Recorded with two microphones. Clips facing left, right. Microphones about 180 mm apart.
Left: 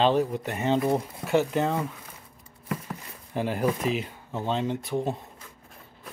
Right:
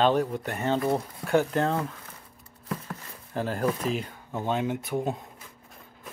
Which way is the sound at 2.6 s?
10° left (ahead or behind).